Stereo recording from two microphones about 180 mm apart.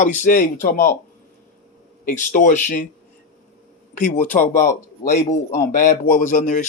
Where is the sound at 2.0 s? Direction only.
45° left (ahead or behind).